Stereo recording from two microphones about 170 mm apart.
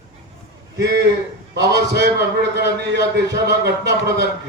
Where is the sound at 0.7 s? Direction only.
80° right.